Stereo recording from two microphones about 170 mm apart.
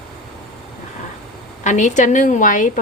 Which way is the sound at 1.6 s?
45° left (ahead or behind).